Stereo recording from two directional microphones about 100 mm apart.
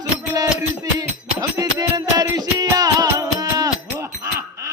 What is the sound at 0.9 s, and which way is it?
Music, 40° right (ahead or behind).